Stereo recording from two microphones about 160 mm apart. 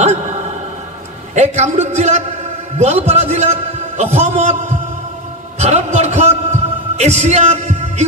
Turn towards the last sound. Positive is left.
turn(degrees=-45)  # may be behind; listen again after turning